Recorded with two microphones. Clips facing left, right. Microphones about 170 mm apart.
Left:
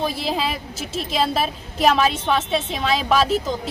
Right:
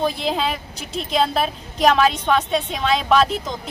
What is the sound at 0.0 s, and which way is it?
A woman's voice, 5° left (ahead or behind).